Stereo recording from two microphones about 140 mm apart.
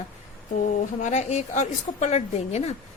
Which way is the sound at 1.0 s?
55° left (ahead or behind).